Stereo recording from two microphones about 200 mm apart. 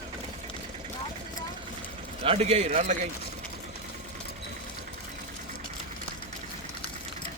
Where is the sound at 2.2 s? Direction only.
30° right (ahead or behind).